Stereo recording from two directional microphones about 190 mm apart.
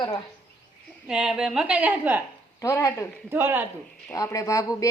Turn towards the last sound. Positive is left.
turn(degrees=15)  # may be behind; listen again after turning